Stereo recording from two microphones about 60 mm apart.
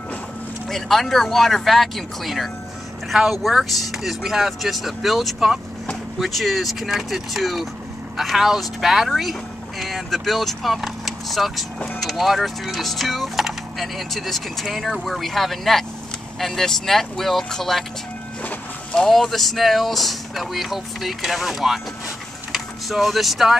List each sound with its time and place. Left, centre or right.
0.7 s speech: centre
19.0 s speech: centre